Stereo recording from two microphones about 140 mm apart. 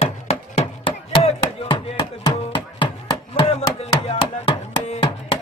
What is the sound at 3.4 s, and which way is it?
Chopping, 45° left (ahead or behind).